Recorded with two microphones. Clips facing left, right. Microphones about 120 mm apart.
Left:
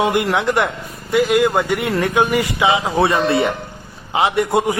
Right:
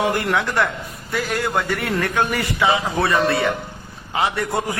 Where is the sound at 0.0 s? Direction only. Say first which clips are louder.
Left 3 dB; 15° left (ahead or behind).